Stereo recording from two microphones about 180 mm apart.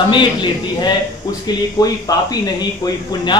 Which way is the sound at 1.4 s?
20° left (ahead or behind).